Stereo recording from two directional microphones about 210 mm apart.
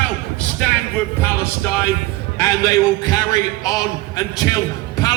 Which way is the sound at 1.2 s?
10° left (ahead or behind).